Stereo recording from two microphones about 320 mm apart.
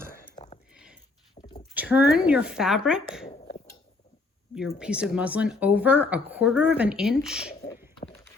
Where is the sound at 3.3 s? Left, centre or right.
Left.